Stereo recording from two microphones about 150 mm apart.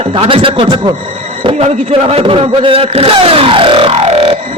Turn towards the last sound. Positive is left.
turn(degrees=-40)  # may be behind; listen again after turning